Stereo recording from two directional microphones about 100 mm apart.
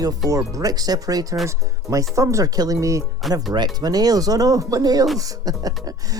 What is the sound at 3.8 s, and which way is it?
Speech, 40° right (ahead or behind).